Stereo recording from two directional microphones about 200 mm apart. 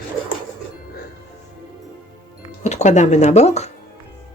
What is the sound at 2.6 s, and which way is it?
Speech, 35° left (ahead or behind).